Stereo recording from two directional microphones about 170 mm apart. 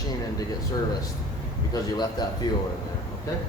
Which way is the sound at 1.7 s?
25° left (ahead or behind).